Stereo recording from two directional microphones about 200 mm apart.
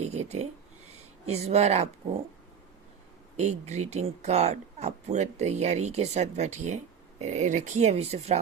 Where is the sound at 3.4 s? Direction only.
35° right (ahead or behind).